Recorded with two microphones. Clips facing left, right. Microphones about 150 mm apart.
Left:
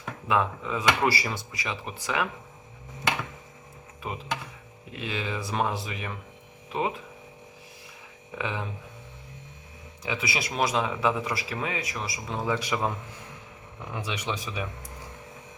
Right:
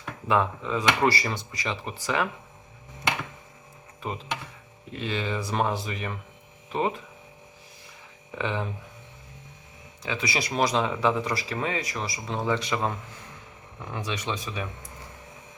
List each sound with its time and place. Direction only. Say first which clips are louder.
0.0 s speech: right 1 dB; centre (ahead or behind)
4.0 s speech: even; 5° left (ahead or behind)
8.4 s speech: right 3 dB; 5° left (ahead or behind)
10.0 s speech: right 1 dB; 10° left (ahead or behind)
13.9 s speech: right 1 dB; 10° left (ahead or behind)